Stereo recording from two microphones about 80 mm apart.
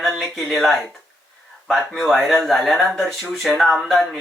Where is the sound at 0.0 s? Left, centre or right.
Centre.